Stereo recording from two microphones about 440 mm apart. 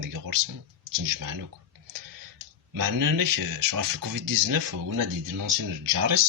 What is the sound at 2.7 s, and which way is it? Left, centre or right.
Speech, right.